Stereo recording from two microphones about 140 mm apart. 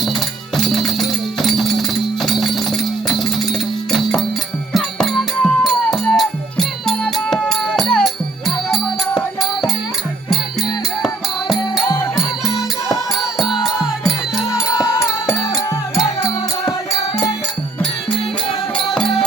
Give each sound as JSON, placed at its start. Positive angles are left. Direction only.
{"t": 0.5, "sound": "music", "side_deg": 0}
{"t": 4.7, "sound": "music", "side_deg": 0}
{"t": 14.8, "sound": "music", "side_deg": 25}
{"t": 18.9, "sound": "music", "side_deg": 0}